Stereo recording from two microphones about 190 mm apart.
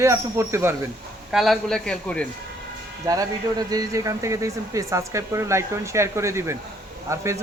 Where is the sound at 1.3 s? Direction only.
Centre (ahead or behind).